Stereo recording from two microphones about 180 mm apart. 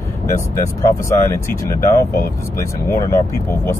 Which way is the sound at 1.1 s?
15° left (ahead or behind).